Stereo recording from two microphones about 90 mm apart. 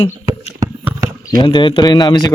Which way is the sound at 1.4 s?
60° left (ahead or behind).